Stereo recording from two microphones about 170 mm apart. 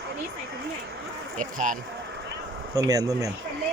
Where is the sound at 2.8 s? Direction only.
20° right (ahead or behind).